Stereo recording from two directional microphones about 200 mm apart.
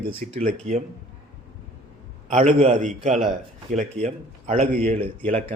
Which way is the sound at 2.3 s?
35° right (ahead or behind).